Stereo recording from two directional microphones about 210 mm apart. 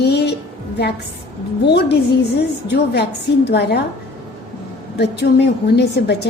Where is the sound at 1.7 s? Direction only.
55° left (ahead or behind).